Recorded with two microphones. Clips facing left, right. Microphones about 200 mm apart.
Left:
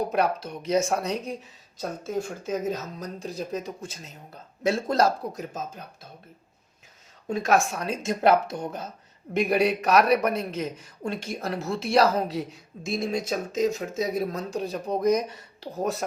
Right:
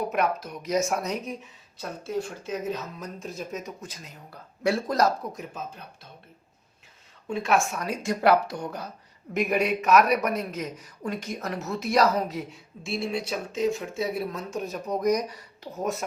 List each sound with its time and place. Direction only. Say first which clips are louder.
0.0 s speech: left 2 dB; 35° left (ahead or behind)
1.8 s speech: left 1 dB; 45° left (ahead or behind)
7.3 s speech: left 2 dB; 40° left (ahead or behind); by 8.9 s 20° left (ahead or behind)
9.3 s speech: left 2 dB; 30° left (ahead or behind)